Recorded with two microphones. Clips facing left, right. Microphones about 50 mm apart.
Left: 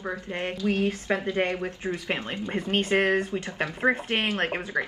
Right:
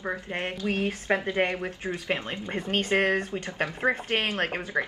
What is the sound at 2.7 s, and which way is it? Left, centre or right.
A woman's voice, left.